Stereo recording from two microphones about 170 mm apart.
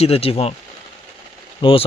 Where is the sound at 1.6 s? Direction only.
30° left (ahead or behind).